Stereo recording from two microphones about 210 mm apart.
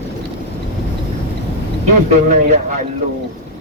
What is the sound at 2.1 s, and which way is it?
Speech, 35° right (ahead or behind).